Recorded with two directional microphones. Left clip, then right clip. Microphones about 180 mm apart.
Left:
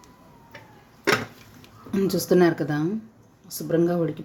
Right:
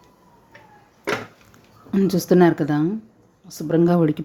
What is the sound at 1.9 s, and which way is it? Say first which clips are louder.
Speech: right 3 dB; 20° right (ahead or behind).